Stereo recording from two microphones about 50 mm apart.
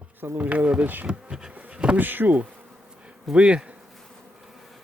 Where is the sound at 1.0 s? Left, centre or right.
Centre.